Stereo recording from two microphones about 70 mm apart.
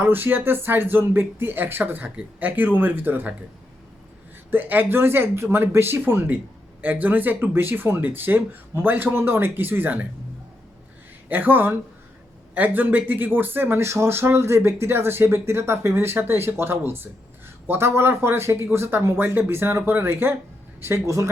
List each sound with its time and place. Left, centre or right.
0.0 s speech: right
4.5 s speech: right
11.3 s speech: right
13.8 s speech: right